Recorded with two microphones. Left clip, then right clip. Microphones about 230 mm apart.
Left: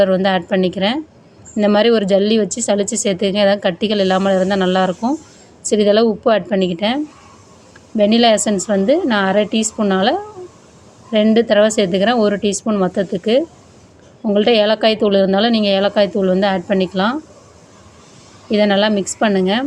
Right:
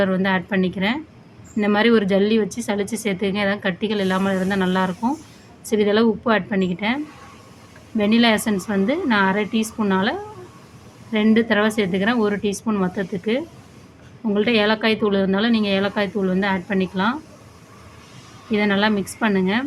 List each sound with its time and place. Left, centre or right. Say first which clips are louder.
0.0 s a woman's voice: left 7 dB; centre
18.5 s a woman's voice: left 6 dB; left